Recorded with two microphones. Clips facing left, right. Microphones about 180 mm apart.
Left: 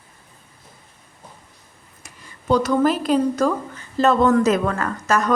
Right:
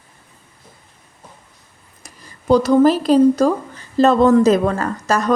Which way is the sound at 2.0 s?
40° right (ahead or behind).